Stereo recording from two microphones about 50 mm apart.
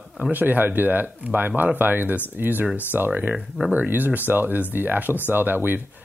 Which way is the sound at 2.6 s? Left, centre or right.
Right.